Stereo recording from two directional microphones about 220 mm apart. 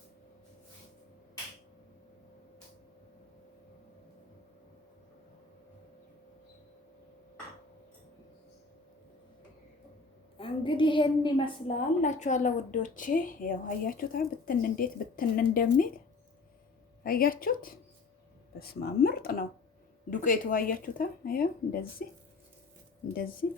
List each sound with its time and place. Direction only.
10.3 s a woman's voice: 25° left (ahead or behind)
12.0 s a woman's voice: 35° left (ahead or behind)
17.0 s a woman's voice: 40° left (ahead or behind)
23.1 s a woman's voice: 40° left (ahead or behind)